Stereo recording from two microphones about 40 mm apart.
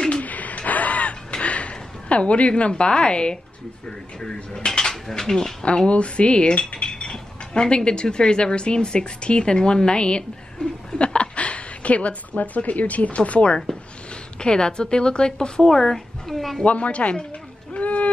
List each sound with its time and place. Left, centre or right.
0.2 s gasp: left
1.4 s a woman's voice: left
4.2 s mechanisms: centre
5.6 s cutlery: left
11.0 s a woman's voice: left
14.4 s speech: centre
16.6 s a woman's voice: left
17.7 s a sound: left